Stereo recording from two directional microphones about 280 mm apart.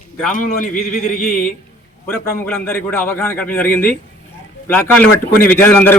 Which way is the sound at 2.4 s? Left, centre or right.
Centre.